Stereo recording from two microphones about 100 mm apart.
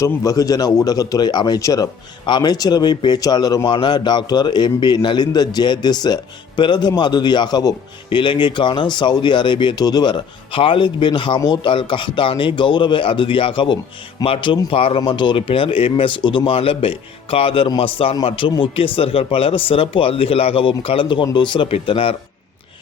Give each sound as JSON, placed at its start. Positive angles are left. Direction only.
{"t": 0.0, "sound": "a man's voice", "side_deg": 35}
{"t": 11.3, "sound": "a man's voice", "side_deg": 40}
{"t": 11.6, "sound": "speech", "side_deg": 55}
{"t": 15.0, "sound": "speech", "side_deg": 50}
{"t": 21.7, "sound": "speech", "side_deg": 70}